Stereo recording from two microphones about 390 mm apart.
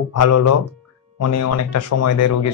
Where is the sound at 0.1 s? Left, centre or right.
Left.